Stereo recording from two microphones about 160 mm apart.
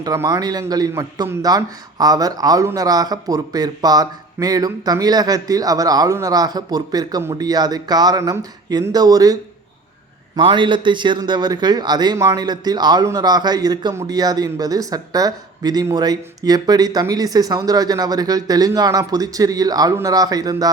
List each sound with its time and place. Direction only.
0.0 s a man's voice: 20° right (ahead or behind)